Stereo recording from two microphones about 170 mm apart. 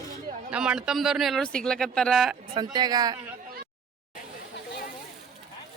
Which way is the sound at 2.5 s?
25° right (ahead or behind).